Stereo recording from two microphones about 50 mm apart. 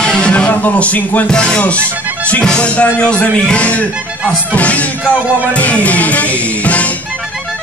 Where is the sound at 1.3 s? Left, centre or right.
Centre.